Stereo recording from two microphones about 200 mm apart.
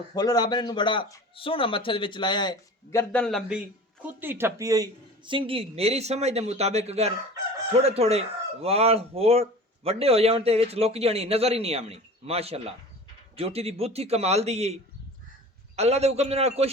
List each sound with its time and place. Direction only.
0.1 s speech: 20° left (ahead or behind); by 3.6 s centre (ahead or behind)
4.0 s speech: 10° right (ahead or behind); by 16.7 s 30° right (ahead or behind)